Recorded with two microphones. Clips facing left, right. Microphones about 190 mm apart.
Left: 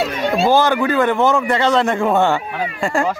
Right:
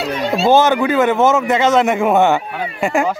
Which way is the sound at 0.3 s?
20° right (ahead or behind).